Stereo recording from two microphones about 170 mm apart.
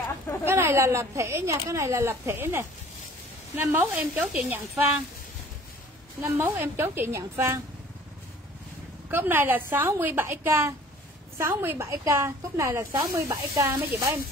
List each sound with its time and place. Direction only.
0.5 s speech: 15° right (ahead or behind)
3.6 s speech: 10° right (ahead or behind)
6.2 s speech: 10° right (ahead or behind)
9.1 s speech: 10° right (ahead or behind)